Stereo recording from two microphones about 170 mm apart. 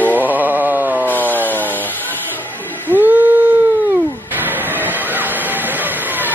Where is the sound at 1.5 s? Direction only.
10° left (ahead or behind).